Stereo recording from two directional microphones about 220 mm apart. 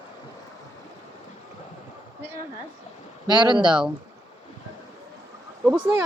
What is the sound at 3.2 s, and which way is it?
Speech, 20° right (ahead or behind).